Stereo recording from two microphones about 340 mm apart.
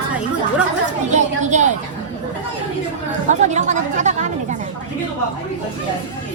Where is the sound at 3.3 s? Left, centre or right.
Right.